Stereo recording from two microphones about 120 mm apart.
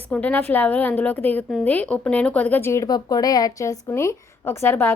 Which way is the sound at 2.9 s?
35° left (ahead or behind).